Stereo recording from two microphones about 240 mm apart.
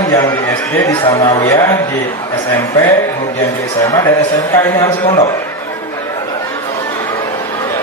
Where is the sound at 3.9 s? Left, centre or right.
Centre.